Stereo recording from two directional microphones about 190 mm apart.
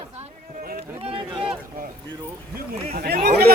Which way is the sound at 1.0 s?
30° right (ahead or behind).